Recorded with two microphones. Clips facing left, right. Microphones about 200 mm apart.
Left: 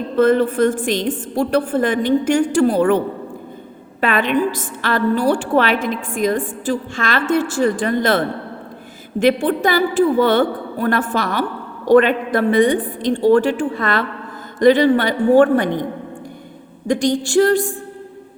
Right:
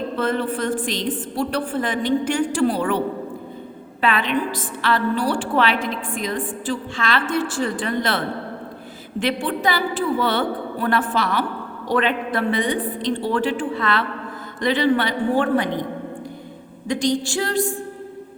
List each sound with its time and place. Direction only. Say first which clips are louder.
0.2 s a woman's voice: left 10 dB; 45° left (ahead or behind)
4.0 s a woman's voice: left 4 dB; 50° left (ahead or behind)
9.2 s a woman's voice: left 7 dB; 45° left (ahead or behind)
16.8 s a woman's voice: left 4 dB; 45° left (ahead or behind)